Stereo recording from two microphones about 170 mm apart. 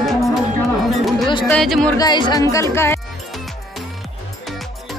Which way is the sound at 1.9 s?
25° left (ahead or behind).